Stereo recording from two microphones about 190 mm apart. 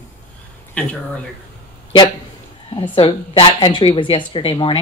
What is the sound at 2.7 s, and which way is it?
Speech, 25° left (ahead or behind).